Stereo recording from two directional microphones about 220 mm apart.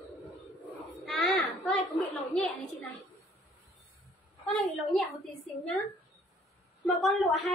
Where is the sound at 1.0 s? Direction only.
Centre (ahead or behind).